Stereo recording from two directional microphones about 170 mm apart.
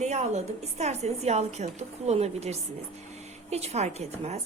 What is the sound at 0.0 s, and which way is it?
A woman's voice, 40° right (ahead or behind).